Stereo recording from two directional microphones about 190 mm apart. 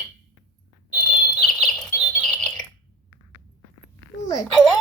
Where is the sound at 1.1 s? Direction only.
Centre (ahead or behind).